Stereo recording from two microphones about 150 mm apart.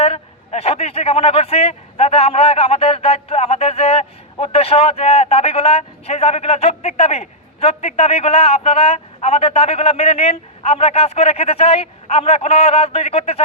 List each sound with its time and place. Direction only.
0.0 s a man's voice: 40° left (ahead or behind)